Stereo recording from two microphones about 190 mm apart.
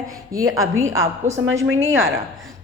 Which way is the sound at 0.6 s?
90° right.